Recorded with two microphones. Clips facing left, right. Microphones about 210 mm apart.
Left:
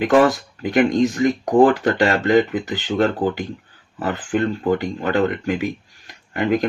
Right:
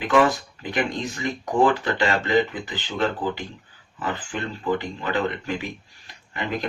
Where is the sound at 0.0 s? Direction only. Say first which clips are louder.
Left 5 dB; 45° left (ahead or behind).